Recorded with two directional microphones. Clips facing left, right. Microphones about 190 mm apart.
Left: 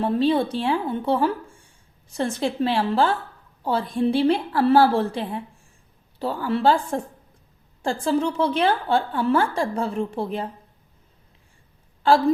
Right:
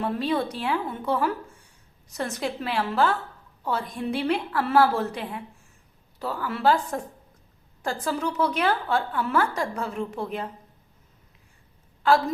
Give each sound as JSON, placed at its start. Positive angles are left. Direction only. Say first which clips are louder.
{"t": 0.0, "sound": "a woman's voice", "louder": "left 5 dB", "side_deg": 30}
{"t": 12.0, "sound": "a woman's voice", "louder": "left 3 dB", "side_deg": 30}